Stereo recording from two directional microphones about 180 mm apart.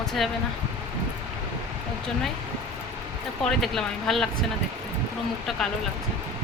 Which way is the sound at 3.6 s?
Centre (ahead or behind).